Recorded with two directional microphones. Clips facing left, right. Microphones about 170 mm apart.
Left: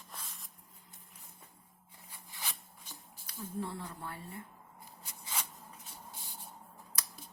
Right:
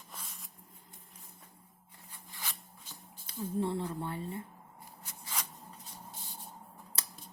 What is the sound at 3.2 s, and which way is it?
Speech, 25° right (ahead or behind).